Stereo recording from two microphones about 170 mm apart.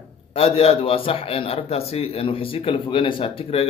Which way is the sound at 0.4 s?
35° left (ahead or behind).